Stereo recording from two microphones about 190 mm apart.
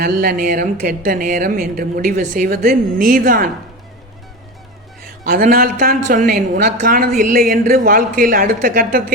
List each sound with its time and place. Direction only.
0.0 s a woman's voice: 50° right (ahead or behind)
5.2 s a woman's voice: 50° right (ahead or behind)